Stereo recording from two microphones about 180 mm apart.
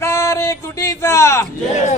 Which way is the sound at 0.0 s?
15° left (ahead or behind).